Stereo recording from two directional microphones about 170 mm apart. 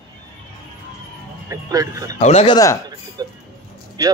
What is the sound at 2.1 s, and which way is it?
Speech, 40° left (ahead or behind).